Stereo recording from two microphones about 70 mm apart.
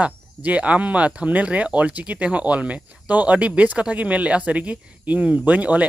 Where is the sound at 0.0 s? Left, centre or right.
Centre.